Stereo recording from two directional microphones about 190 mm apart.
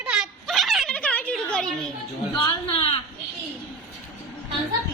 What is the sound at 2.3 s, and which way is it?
Speech, 25° left (ahead or behind).